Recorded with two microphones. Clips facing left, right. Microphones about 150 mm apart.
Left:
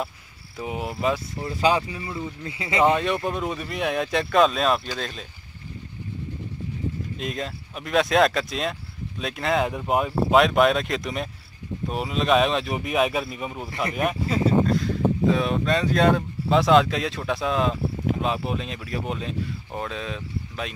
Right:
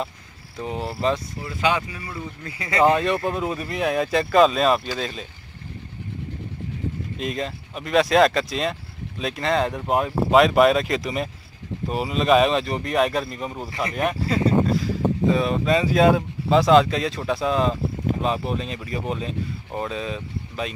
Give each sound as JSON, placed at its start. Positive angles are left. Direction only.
{"t": 0.6, "sound": "speech", "side_deg": 10}
{"t": 1.4, "sound": "speech", "side_deg": 30}
{"t": 2.8, "sound": "speech", "side_deg": 0}
{"t": 7.2, "sound": "speech", "side_deg": 0}